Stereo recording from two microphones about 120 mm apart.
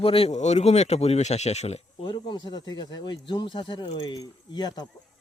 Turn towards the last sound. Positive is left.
turn(degrees=35)  # may be behind; listen again after turning